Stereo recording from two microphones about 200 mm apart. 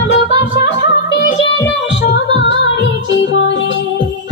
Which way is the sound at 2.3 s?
65° left (ahead or behind).